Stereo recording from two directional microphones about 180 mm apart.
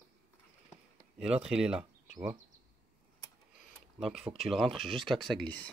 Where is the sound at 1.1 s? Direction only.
5° right (ahead or behind).